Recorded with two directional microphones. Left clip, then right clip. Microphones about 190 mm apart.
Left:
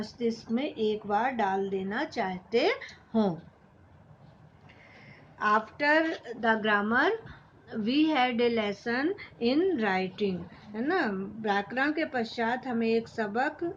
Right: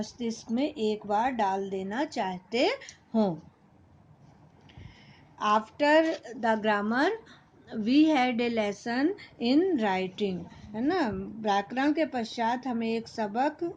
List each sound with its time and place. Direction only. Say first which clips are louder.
0.0 s speech: left 4 dB; 45° right (ahead or behind)
5.4 s a woman's voice: right 1 dB; 45° right (ahead or behind)